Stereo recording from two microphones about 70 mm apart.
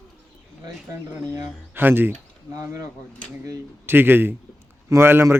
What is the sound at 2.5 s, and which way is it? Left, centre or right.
Speech, right.